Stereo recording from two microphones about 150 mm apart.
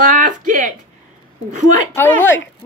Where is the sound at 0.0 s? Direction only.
60° right (ahead or behind).